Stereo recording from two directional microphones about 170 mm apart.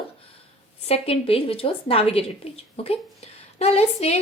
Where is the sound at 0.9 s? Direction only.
35° left (ahead or behind).